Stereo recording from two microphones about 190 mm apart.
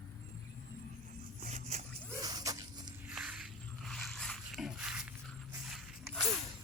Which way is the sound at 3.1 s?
5° right (ahead or behind).